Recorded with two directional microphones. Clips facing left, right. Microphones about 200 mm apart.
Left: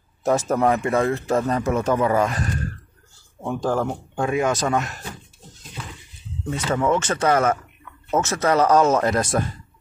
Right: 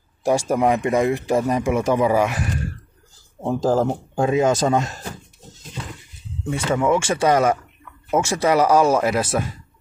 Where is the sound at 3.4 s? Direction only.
30° right (ahead or behind).